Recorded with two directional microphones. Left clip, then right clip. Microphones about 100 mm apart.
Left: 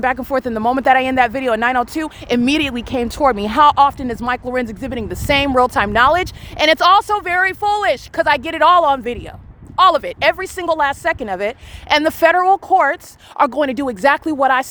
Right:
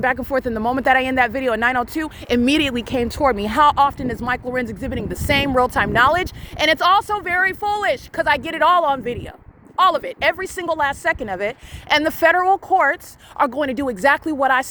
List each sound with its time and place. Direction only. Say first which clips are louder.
0.0 s speech: left 2 dB; 25° left (ahead or behind)
0.3 s speech: left 3 dB; 40° left (ahead or behind)
0.8 s speech: left 3 dB; 30° left (ahead or behind)
2.5 s speech: left 1 dB; 15° left (ahead or behind)
3.1 s speech: left 5 dB; 30° left (ahead or behind); by 9.3 s 45° left (ahead or behind)
9.9 s speech: left 5 dB; 75° left (ahead or behind)
10.2 s speech: left 3 dB; 50° left (ahead or behind)
11.1 s speech: left 2 dB; 35° left (ahead or behind)
13.3 s speech: left 4 dB; 50° left (ahead or behind)
13.7 s speech: left 2 dB; 40° left (ahead or behind)